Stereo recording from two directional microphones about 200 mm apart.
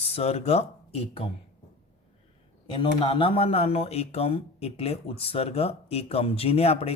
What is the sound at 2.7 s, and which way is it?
Speech, 25° left (ahead or behind).